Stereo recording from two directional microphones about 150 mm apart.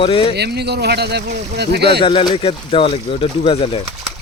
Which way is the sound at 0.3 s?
90° right.